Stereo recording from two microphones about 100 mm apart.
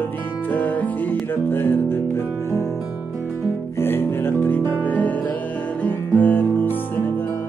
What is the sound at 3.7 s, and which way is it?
Music, 25° left (ahead or behind).